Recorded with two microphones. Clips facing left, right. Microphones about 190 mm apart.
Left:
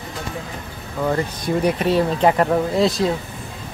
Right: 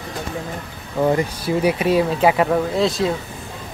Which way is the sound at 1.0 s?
40° right (ahead or behind).